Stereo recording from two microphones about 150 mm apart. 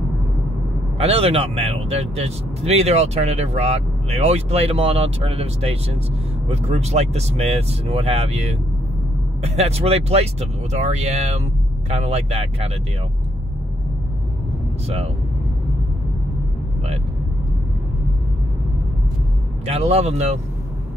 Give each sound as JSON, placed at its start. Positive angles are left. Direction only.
{"t": 0.9, "sound": "speech", "side_deg": -40}
{"t": 19.6, "sound": "speech", "side_deg": -45}